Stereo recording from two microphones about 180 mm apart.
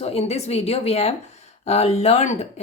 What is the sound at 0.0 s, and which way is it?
Speech, 35° left (ahead or behind).